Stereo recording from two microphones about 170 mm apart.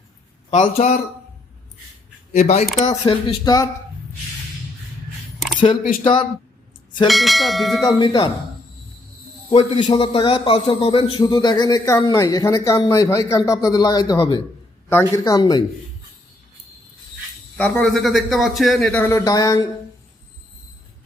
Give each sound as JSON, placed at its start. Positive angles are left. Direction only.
{"t": 0.5, "sound": "a man's voice", "side_deg": 45}
{"t": 2.3, "sound": "a man's voice", "side_deg": 40}
{"t": 3.4, "sound": "speech", "side_deg": 20}
{"t": 6.0, "sound": "speech", "side_deg": 30}
{"t": 7.1, "sound": "speech", "side_deg": 0}
{"t": 7.9, "sound": "speech", "side_deg": 25}
{"t": 9.5, "sound": "a man's voice", "side_deg": 35}
{"t": 14.8, "sound": "speech", "side_deg": 15}
{"t": 17.6, "sound": "speech", "side_deg": 5}